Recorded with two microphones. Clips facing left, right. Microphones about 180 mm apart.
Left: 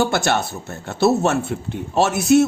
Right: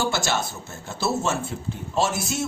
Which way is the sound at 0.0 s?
60° left (ahead or behind).